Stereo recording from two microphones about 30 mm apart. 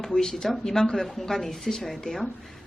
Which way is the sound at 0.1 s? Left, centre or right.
Left.